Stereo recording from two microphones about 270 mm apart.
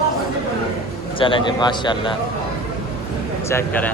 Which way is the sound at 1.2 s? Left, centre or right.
Centre.